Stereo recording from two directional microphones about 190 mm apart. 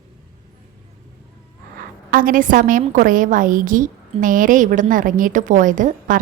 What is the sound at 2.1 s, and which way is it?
A woman's voice, 45° right (ahead or behind).